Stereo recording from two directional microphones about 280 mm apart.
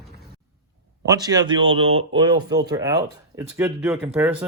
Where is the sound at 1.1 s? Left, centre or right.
Centre.